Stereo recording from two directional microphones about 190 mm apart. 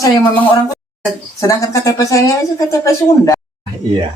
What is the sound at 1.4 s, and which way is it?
Speech, 15° left (ahead or behind).